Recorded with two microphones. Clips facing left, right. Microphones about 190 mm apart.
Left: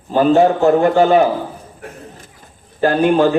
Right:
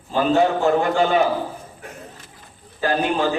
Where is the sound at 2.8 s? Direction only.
55° left (ahead or behind).